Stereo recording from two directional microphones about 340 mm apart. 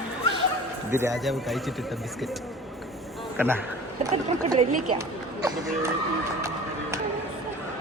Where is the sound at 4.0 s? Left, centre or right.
Centre.